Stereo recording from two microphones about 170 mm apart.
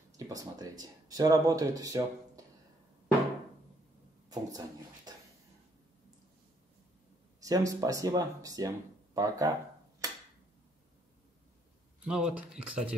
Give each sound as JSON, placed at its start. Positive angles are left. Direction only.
{"t": 0.3, "sound": "speech", "side_deg": -20}
{"t": 4.3, "sound": "speech", "side_deg": -20}
{"t": 7.3, "sound": "speech", "side_deg": -20}
{"t": 12.0, "sound": "speech", "side_deg": -5}